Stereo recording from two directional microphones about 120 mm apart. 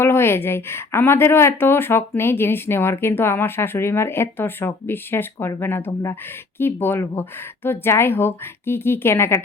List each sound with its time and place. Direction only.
0.0 s speech: 20° left (ahead or behind)